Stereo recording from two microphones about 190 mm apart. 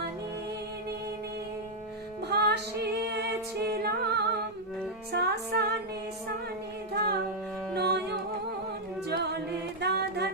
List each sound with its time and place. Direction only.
2.3 s music: 60° right (ahead or behind)
6.9 s a capella: 55° right (ahead or behind)
7.9 s music: 60° right (ahead or behind)
9.0 s a capella: 60° right (ahead or behind)
9.8 s music: 60° right (ahead or behind)